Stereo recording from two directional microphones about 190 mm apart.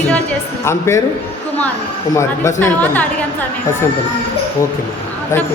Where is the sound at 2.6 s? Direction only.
10° left (ahead or behind).